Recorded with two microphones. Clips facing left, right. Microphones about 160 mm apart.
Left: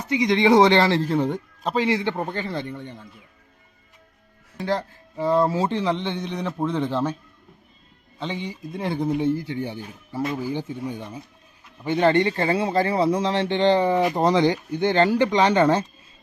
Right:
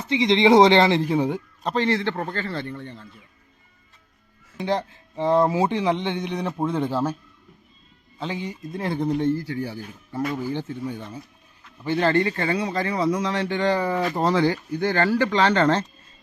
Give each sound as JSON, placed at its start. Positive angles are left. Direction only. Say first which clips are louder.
{"t": 0.0, "sound": "speech", "louder": "right 1 dB", "side_deg": -25}
{"t": 1.6, "sound": "a man's voice", "louder": "even", "side_deg": 10}
{"t": 4.5, "sound": "a man's voice", "louder": "right 1 dB", "side_deg": -20}
{"t": 8.2, "sound": "a man's voice", "louder": "even", "side_deg": 0}